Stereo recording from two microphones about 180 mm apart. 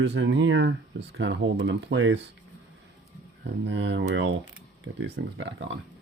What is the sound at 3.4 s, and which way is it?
Speech, 85° right.